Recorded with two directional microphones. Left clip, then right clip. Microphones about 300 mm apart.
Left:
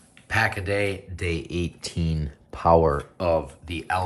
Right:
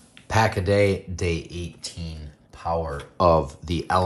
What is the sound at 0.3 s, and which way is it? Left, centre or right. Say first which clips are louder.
Speech: right 2 dB; centre.